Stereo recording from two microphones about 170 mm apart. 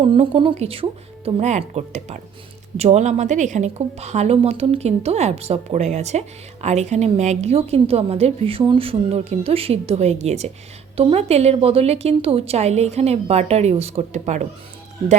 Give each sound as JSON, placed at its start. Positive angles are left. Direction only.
{"t": 0.0, "sound": "a woman's voice", "side_deg": -30}